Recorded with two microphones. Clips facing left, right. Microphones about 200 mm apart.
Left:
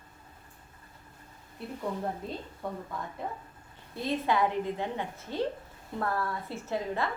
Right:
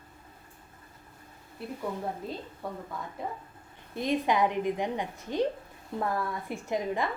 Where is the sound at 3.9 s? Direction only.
15° right (ahead or behind).